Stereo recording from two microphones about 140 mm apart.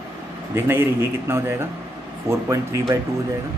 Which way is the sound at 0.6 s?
15° right (ahead or behind).